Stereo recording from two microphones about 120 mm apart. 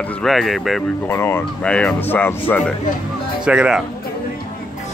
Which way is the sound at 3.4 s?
5° right (ahead or behind).